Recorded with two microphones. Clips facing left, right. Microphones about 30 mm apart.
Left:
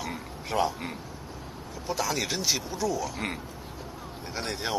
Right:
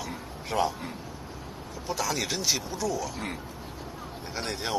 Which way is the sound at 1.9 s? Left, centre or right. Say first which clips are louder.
Left 1 dB; centre.